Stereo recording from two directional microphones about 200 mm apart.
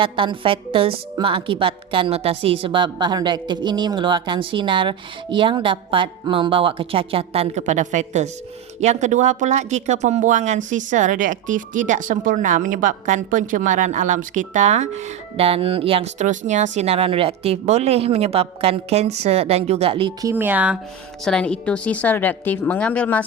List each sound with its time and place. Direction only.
0.0 s a woman's voice: 25° right (ahead or behind)
20.2 s speech: 10° right (ahead or behind)
21.2 s a woman's voice: 5° left (ahead or behind)